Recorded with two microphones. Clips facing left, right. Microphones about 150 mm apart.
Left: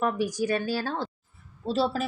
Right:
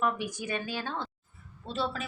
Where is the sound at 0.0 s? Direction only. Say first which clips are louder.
Left 5 dB; 40° left (ahead or behind).